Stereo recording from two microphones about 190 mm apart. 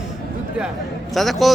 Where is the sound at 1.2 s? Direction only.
Centre (ahead or behind).